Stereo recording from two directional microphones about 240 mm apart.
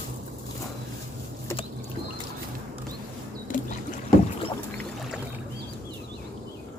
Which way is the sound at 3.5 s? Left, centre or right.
Left.